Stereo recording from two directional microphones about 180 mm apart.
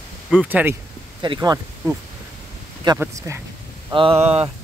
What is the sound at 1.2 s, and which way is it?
Speech, 25° right (ahead or behind).